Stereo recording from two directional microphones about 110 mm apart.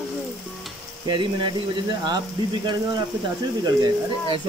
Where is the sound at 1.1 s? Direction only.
45° right (ahead or behind).